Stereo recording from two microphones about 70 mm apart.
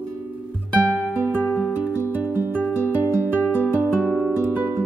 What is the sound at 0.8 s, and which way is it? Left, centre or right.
Music, right.